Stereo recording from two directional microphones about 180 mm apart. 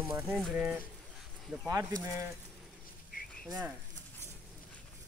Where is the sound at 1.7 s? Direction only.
20° right (ahead or behind).